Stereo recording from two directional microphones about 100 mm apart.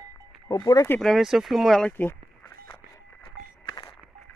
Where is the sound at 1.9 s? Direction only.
20° left (ahead or behind).